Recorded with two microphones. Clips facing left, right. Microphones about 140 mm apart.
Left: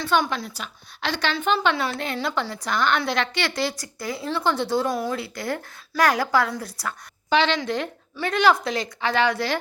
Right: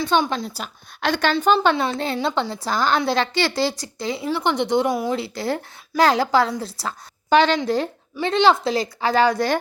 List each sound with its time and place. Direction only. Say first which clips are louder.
0.0 s a woman's voice: right 2 dB; 15° right (ahead or behind)
0.3 s a woman's voice: right 3 dB; 35° right (ahead or behind)
1.0 s a woman's voice: right 6 dB; 45° right (ahead or behind)
1.5 s a woman's voice: right 4 dB; 30° right (ahead or behind)
5.1 s a woman's voice: right 4 dB; 30° right (ahead or behind)
7.3 s a woman's voice: right 5 dB; 45° right (ahead or behind)
8.1 s a woman's voice: right 3 dB; 25° right (ahead or behind); by 9.6 s 40° right (ahead or behind)